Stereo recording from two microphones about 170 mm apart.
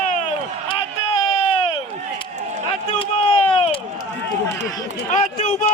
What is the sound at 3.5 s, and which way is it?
Run, 30° left (ahead or behind).